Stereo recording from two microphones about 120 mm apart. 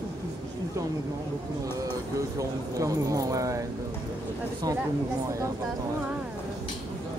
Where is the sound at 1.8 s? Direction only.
30° right (ahead or behind).